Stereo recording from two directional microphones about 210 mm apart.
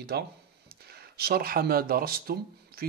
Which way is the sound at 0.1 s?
50° right (ahead or behind).